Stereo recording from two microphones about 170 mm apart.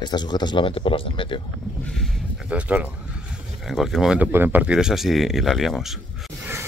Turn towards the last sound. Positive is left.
turn(degrees=0)  # may be behind; listen again after turning